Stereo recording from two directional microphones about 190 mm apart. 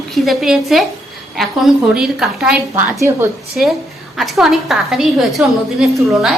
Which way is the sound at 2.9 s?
15° right (ahead or behind).